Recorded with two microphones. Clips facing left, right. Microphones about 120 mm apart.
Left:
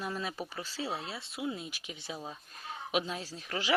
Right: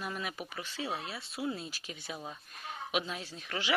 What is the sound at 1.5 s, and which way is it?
Speech, 15° left (ahead or behind).